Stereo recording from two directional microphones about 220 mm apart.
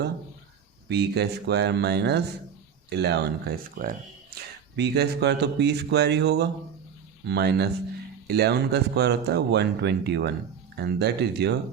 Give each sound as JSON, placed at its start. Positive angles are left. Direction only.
{"t": 0.9, "sound": "speech", "side_deg": -50}
{"t": 3.8, "sound": "speech", "side_deg": -40}
{"t": 4.8, "sound": "speech", "side_deg": -50}